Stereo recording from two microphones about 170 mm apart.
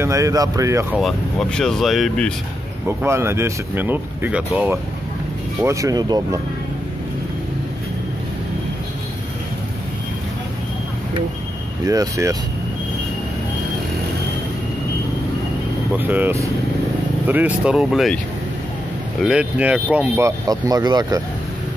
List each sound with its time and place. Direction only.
0.0 s speech: 20° right (ahead or behind)
0.9 s speech: centre (ahead or behind)
3.0 s speech: 15° right (ahead or behind)
11.8 s speech: 20° right (ahead or behind)
15.9 s speech: 10° right (ahead or behind)
19.2 s speech: 5° right (ahead or behind)
20.2 s speech: 20° right (ahead or behind)